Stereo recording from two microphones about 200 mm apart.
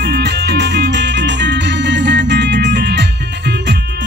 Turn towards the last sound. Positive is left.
turn(degrees=-55)  # may be behind; listen again after turning